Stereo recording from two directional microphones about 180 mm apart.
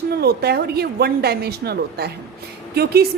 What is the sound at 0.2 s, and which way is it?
A woman's voice, 60° right (ahead or behind).